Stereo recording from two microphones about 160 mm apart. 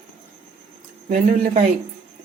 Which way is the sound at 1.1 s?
50° right (ahead or behind).